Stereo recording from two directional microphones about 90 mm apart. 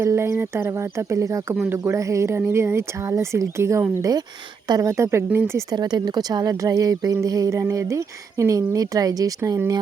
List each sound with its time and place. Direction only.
0.0 s a woman's voice: 30° right (ahead or behind)
1.7 s a woman's voice: 25° right (ahead or behind)
5.7 s a woman's voice: 50° right (ahead or behind)